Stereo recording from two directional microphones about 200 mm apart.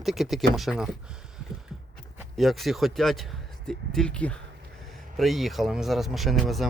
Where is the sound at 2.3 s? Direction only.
Centre (ahead or behind).